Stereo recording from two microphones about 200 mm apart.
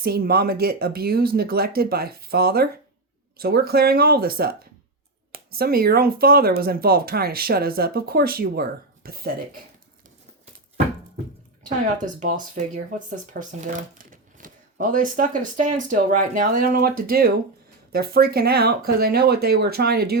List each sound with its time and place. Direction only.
0.0 s speech: 50° right (ahead or behind)
11.6 s speech: 40° right (ahead or behind)